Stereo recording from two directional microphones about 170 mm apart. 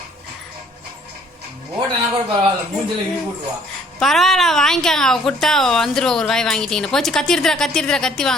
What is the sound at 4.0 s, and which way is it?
A woman's voice, centre (ahead or behind).